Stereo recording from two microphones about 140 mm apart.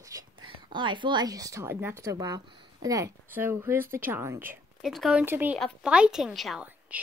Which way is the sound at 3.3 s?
15° right (ahead or behind).